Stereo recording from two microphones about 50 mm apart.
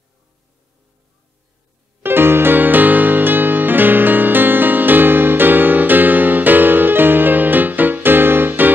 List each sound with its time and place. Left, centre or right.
2.0 s music: right